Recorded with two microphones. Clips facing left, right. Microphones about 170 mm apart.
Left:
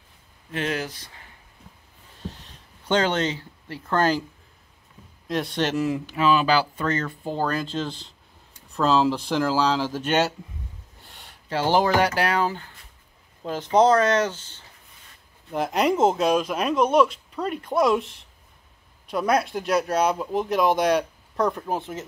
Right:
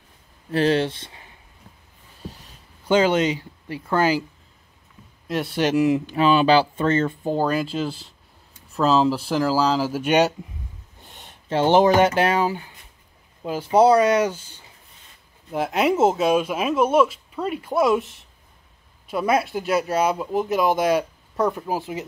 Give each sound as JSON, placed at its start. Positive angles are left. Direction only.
{"t": 0.5, "sound": "speech", "side_deg": -30}
{"t": 2.9, "sound": "speech", "side_deg": -10}
{"t": 5.3, "sound": "speech", "side_deg": -5}
{"t": 6.1, "sound": "speech", "side_deg": -30}
{"t": 7.3, "sound": "speech", "side_deg": -10}